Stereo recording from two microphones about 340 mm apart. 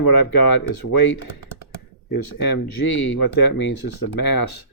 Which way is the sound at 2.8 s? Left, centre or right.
Left.